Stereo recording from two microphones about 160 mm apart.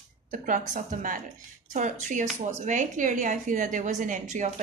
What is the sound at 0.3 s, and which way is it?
A woman's voice, 55° right (ahead or behind).